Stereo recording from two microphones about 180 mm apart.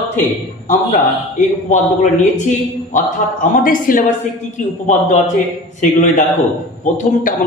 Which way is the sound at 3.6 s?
50° left (ahead or behind).